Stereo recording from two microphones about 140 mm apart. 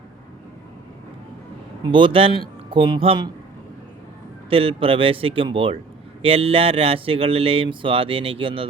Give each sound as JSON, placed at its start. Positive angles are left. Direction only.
{"t": 1.9, "sound": "speech", "side_deg": -35}
{"t": 4.4, "sound": "speech", "side_deg": -40}